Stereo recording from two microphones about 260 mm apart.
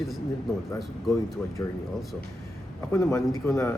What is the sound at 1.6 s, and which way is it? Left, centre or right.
Speech, centre.